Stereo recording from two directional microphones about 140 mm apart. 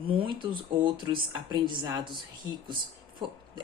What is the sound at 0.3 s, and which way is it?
Speech, 35° right (ahead or behind).